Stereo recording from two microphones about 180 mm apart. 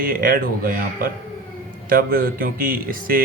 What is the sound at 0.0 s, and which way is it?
A man's voice, 50° right (ahead or behind).